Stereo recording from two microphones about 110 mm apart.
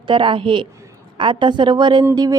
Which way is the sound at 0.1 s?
50° right (ahead or behind).